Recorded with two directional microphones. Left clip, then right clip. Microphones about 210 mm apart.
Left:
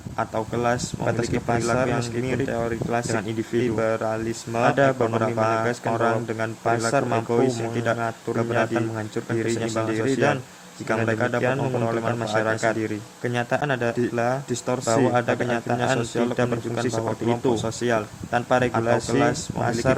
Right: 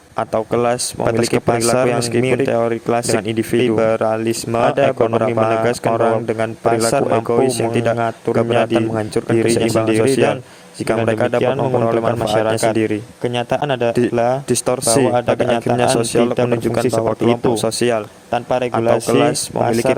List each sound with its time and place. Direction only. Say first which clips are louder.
0.2 s speech: right 8 dB; 40° right (ahead or behind)
14.9 s speech: right 5 dB; 35° right (ahead or behind)
18.3 s a man's voice: right 4 dB; 30° right (ahead or behind)